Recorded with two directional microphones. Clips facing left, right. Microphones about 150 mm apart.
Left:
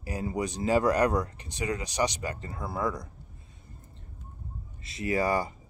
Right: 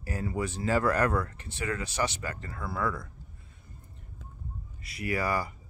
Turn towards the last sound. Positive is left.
turn(degrees=25)  # may be behind; listen again after turning